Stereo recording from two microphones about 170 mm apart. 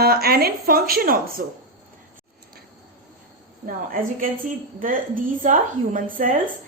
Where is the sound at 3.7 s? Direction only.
55° right (ahead or behind).